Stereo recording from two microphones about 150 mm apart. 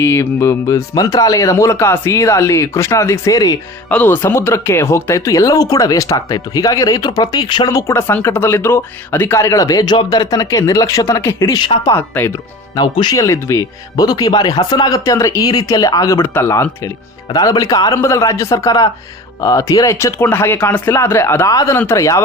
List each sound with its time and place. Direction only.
0.0 s speech: 15° left (ahead or behind)
3.8 s speech: 10° left (ahead or behind); by 11.9 s 30° left (ahead or behind)
11.9 s speech: 15° left (ahead or behind)